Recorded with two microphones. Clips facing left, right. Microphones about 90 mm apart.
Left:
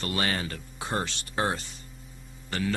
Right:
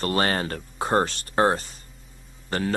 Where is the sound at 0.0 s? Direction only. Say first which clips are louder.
Right 6 dB; 40° right (ahead or behind).